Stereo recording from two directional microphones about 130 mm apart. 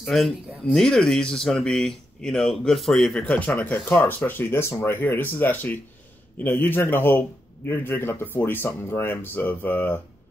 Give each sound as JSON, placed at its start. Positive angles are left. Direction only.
{"t": 0.0, "sound": "a man's voice", "side_deg": 0}